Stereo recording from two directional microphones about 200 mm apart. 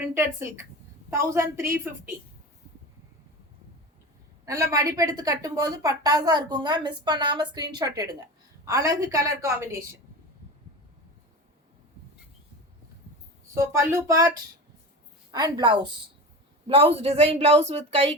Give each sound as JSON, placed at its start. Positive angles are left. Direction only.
{"t": 0.0, "sound": "a woman's voice", "side_deg": -15}
{"t": 4.4, "sound": "a woman's voice", "side_deg": -15}
{"t": 13.5, "sound": "a woman's voice", "side_deg": -15}